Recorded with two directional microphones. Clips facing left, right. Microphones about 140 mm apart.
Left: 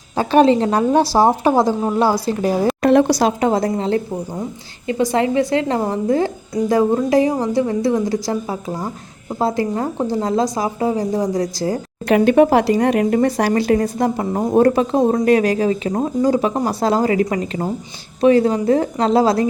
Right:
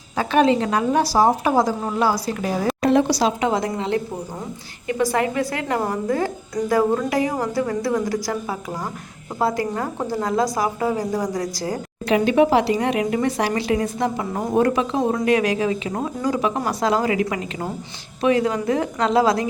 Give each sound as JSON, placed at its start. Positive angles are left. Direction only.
{"t": 0.2, "sound": "a woman's voice", "side_deg": 30}
{"t": 2.8, "sound": "speech", "side_deg": 60}
{"t": 4.9, "sound": "a woman's voice", "side_deg": 25}
{"t": 12.0, "sound": "a woman's voice", "side_deg": 55}